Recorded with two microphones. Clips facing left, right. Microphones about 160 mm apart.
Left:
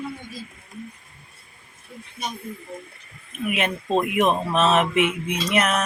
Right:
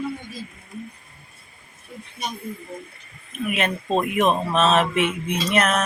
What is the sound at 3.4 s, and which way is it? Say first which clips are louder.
Speech: even; 15° left (ahead or behind).